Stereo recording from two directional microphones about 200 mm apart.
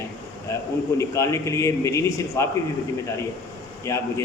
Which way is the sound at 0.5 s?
15° left (ahead or behind).